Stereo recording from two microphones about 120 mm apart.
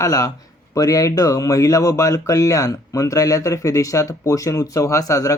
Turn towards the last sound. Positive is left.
turn(degrees=25)  # may be behind; listen again after turning